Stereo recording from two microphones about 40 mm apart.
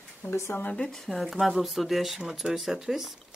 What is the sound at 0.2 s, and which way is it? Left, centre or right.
Speech, left.